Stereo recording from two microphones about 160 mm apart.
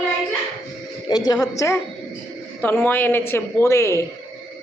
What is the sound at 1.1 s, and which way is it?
A woman's voice, 25° left (ahead or behind).